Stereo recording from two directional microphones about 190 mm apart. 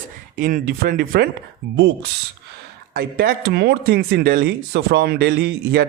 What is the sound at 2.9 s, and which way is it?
Speech, 55° right (ahead or behind).